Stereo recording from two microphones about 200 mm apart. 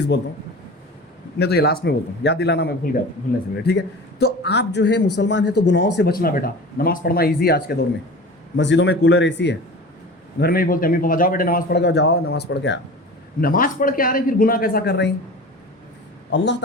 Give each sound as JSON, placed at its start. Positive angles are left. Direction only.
{"t": 1.4, "sound": "a man's voice", "side_deg": 55}
{"t": 8.5, "sound": "a man's voice", "side_deg": 65}
{"t": 10.4, "sound": "a man's voice", "side_deg": 45}
{"t": 13.4, "sound": "a man's voice", "side_deg": 45}
{"t": 16.3, "sound": "a man's voice", "side_deg": 60}